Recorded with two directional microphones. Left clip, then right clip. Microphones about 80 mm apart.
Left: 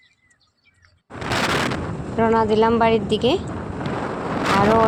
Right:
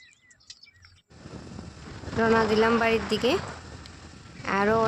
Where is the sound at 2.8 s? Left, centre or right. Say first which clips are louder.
Left 6 dB; left.